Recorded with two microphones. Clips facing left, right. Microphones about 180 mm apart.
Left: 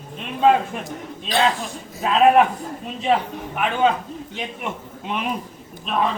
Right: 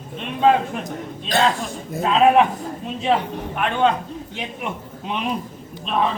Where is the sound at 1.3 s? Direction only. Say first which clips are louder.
Right 1 dB; 45° right (ahead or behind).